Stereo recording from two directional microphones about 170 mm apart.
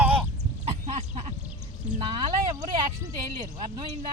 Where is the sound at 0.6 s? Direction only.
35° right (ahead or behind).